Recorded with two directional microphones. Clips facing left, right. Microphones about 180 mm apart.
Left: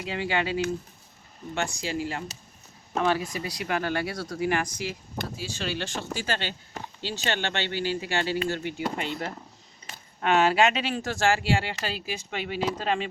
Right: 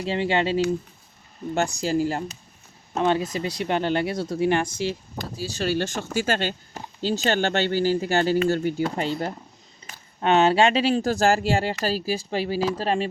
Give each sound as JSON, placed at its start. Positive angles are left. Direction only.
{"t": 0.0, "sound": "speech", "side_deg": -25}
{"t": 1.5, "sound": "speech", "side_deg": -40}
{"t": 3.0, "sound": "speech", "side_deg": -20}
{"t": 5.4, "sound": "speech", "side_deg": -40}